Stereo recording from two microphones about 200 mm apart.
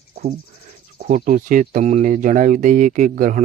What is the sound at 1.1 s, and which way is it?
Speech, 40° right (ahead or behind).